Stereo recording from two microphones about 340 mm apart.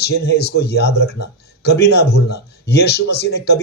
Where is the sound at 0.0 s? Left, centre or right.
Left.